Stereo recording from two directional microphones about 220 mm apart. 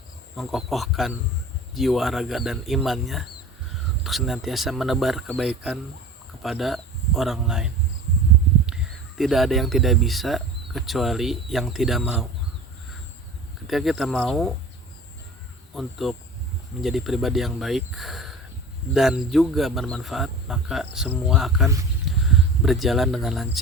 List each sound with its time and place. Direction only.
0.3 s speech: centre (ahead or behind)
13.7 s speech: centre (ahead or behind)
15.7 s speech: centre (ahead or behind)